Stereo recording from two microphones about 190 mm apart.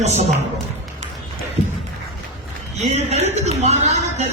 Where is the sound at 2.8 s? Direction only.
35° right (ahead or behind).